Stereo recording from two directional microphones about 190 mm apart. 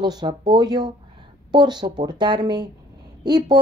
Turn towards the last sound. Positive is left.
turn(degrees=-20)  # may be behind; listen again after turning